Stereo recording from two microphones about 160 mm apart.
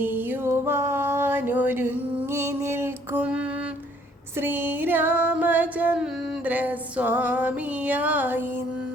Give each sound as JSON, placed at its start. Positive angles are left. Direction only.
{"t": 0.0, "sound": "music", "side_deg": -15}